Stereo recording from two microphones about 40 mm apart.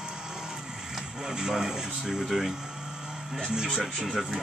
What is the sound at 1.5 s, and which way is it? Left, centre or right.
Speech, centre.